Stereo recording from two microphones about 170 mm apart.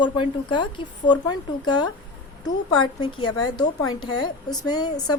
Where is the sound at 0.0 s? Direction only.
25° left (ahead or behind).